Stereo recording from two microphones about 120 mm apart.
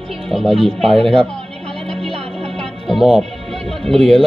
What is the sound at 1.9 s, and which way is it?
Music, 5° left (ahead or behind).